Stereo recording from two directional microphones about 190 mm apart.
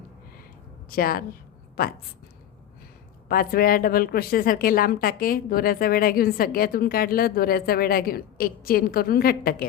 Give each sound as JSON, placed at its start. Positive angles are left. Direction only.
{"t": 0.9, "sound": "a woman's voice", "side_deg": 50}
{"t": 3.2, "sound": "speech", "side_deg": 50}